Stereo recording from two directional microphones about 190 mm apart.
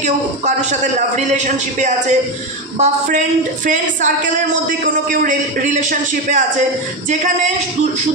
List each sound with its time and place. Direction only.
0.6 s a man's voice: 40° right (ahead or behind)